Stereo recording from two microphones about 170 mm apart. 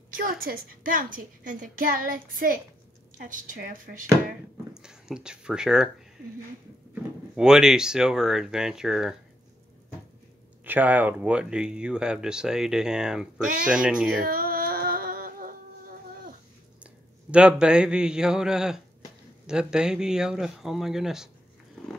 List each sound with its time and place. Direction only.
0.4 s a woman's voice: 55° right (ahead or behind)
4.7 s speech: 5° right (ahead or behind)
7.3 s speech: 5° right (ahead or behind)
10.6 s speech: 10° right (ahead or behind)
14.2 s a sound: 60° right (ahead or behind)
16.8 s a man's voice: 5° right (ahead or behind)